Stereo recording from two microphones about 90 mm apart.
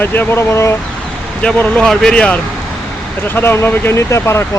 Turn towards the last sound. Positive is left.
turn(degrees=30)  # may be behind; listen again after turning